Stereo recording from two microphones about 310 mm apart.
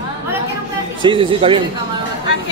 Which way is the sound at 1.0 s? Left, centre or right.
Centre.